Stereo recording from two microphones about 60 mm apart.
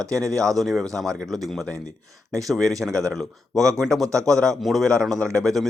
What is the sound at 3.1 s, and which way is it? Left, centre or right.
Speech, centre.